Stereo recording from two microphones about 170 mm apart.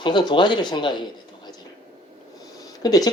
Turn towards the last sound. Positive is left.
turn(degrees=20)  # may be behind; listen again after turning